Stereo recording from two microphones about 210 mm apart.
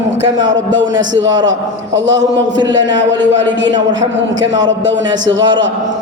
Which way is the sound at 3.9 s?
60° right (ahead or behind).